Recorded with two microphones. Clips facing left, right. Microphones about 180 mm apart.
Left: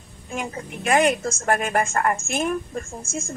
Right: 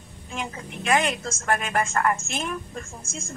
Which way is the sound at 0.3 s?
50° left (ahead or behind).